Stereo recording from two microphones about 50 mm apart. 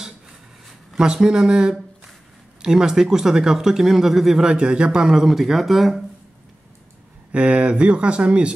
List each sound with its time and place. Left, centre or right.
0.9 s speech: centre
4.5 s speech: centre
7.3 s speech: right